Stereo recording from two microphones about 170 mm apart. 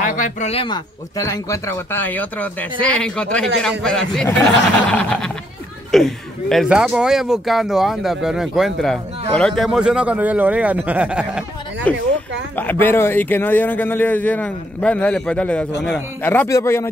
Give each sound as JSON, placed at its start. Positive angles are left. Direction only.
{"t": 0.0, "sound": "speech", "side_deg": 50}
{"t": 0.5, "sound": "a man's voice", "side_deg": 30}
{"t": 11.9, "sound": "a sound", "side_deg": 10}
{"t": 12.5, "sound": "a man's voice", "side_deg": 10}